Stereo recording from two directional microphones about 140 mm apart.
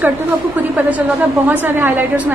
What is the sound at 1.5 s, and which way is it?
Speech, 15° right (ahead or behind).